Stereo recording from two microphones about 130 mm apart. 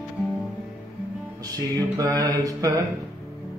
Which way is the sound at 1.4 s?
25° right (ahead or behind).